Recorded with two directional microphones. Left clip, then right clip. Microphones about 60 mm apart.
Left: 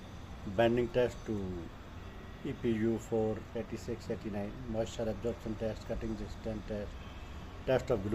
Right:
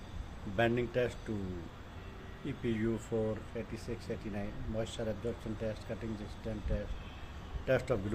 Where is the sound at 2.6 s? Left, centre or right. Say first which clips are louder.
Left 3 dB; right.